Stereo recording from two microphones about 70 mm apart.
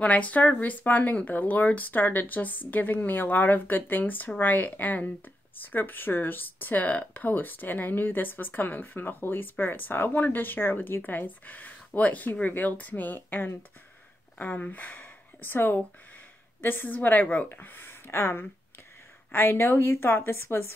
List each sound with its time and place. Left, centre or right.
0.0 s a woman's voice: left